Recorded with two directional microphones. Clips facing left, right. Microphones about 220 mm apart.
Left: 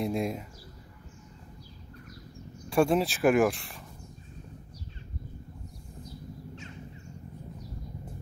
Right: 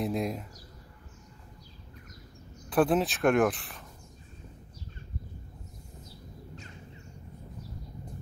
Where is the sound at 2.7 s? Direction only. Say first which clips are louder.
Left 1 dB; centre (ahead or behind).